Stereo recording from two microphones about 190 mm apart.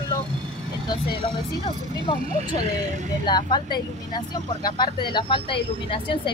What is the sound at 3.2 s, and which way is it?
Speech, 25° left (ahead or behind).